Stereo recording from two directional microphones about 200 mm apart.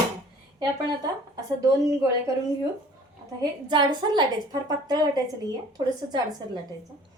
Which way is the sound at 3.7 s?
20° right (ahead or behind).